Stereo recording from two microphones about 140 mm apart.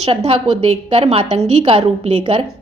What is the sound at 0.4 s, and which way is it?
A woman's voice, 40° right (ahead or behind).